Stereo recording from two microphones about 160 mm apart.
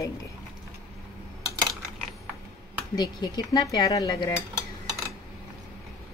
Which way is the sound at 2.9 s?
25° left (ahead or behind).